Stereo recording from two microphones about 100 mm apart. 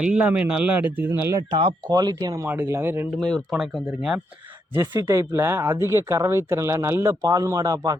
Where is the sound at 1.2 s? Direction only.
30° right (ahead or behind).